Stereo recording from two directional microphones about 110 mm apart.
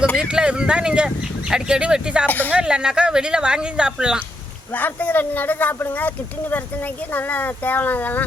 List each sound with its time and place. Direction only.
0.2 s speech: 10° right (ahead or behind)
2.2 s speech: 15° left (ahead or behind)
2.5 s speech: 10° right (ahead or behind)
4.7 s speech: 15° left (ahead or behind)